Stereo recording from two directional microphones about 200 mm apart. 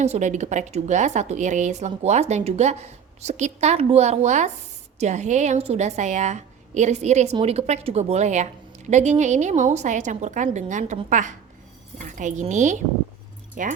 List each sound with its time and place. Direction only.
0.0 s a woman's voice: 35° right (ahead or behind)